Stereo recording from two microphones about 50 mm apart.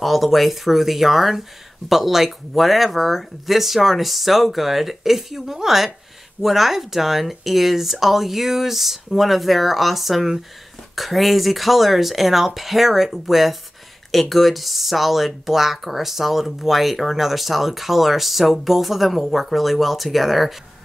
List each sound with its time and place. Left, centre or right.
0.0 s speech: centre